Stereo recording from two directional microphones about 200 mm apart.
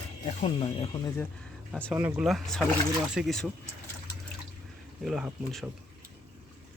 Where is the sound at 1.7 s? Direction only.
5° left (ahead or behind).